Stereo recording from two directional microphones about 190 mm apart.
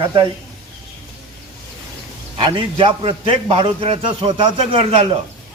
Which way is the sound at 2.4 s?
25° right (ahead or behind).